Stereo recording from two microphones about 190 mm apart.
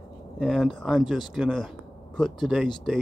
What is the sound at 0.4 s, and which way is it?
Speech, centre (ahead or behind).